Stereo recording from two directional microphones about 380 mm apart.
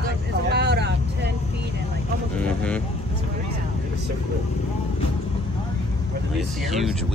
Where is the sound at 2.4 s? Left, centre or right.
Centre.